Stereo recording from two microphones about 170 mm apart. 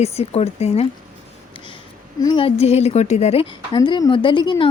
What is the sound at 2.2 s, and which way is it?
A woman's voice, 30° left (ahead or behind).